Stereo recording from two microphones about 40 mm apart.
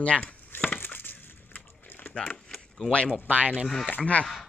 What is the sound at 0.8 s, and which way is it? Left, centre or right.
Wood, left.